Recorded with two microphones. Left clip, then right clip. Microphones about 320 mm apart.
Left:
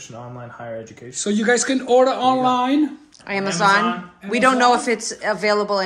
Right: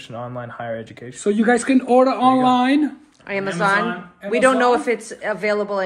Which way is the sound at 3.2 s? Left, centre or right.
Centre.